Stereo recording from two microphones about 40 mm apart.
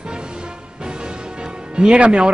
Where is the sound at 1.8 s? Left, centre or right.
Right.